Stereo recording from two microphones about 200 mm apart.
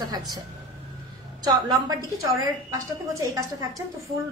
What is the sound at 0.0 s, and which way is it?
Speech, 20° right (ahead or behind).